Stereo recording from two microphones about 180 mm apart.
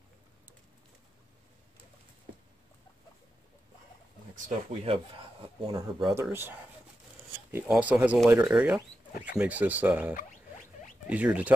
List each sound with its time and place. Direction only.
4.5 s speech: 30° right (ahead or behind)
6.3 s speech: 10° right (ahead or behind)